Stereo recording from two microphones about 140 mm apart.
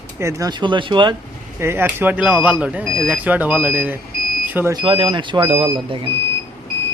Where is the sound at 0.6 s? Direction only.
35° right (ahead or behind).